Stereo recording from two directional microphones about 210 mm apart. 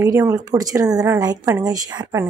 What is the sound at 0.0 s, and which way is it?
A woman's voice, 15° right (ahead or behind).